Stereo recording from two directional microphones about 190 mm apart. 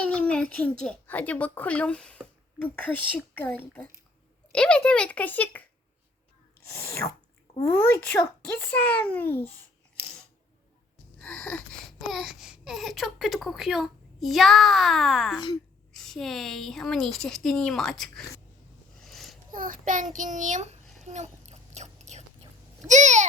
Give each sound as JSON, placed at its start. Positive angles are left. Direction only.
{"t": 0.0, "sound": "a child's voice", "side_deg": 5}
{"t": 3.3, "sound": "a child's voice", "side_deg": 10}
{"t": 6.7, "sound": "a child's voice", "side_deg": 15}
{"t": 11.2, "sound": "speech", "side_deg": 5}
{"t": 19.0, "sound": "a sound", "side_deg": 0}
{"t": 19.5, "sound": "a child's voice", "side_deg": -45}
{"t": 20.1, "sound": "child singing", "side_deg": -40}
{"t": 21.0, "sound": "chewing", "side_deg": -35}
{"t": 22.9, "sound": "child singing", "side_deg": -40}